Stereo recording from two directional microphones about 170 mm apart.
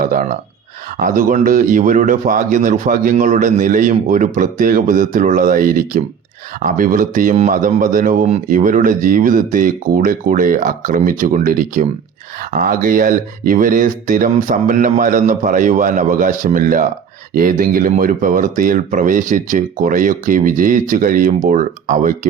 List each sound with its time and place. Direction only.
0.0 s speech: 55° right (ahead or behind)